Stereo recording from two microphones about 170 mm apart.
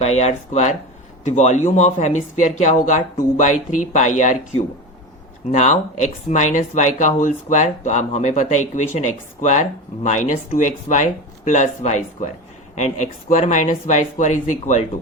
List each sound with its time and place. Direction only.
0.0 s speech: 40° left (ahead or behind)